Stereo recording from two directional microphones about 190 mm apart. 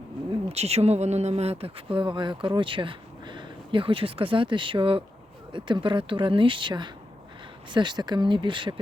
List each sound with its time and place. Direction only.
0.4 s speech: 35° right (ahead or behind)